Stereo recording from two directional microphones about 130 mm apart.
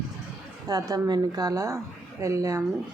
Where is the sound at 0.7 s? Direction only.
30° right (ahead or behind).